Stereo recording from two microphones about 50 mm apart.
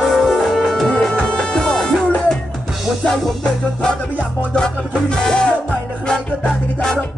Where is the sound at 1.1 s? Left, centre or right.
Centre.